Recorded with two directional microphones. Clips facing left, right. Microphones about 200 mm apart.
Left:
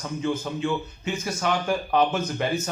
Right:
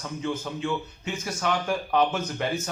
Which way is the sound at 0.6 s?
5° left (ahead or behind).